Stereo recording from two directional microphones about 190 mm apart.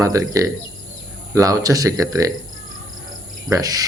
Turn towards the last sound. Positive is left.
turn(degrees=-20)  # may be behind; listen again after turning